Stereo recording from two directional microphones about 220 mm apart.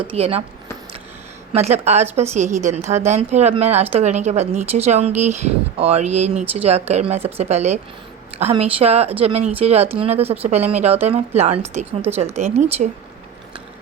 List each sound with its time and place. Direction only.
0.1 s a woman's voice: 25° right (ahead or behind)
1.5 s a woman's voice: 30° right (ahead or behind)